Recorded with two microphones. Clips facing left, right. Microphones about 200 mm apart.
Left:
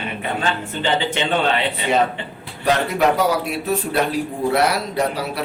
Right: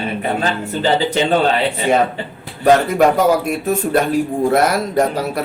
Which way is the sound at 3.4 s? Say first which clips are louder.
Right 4 dB; 50° right (ahead or behind).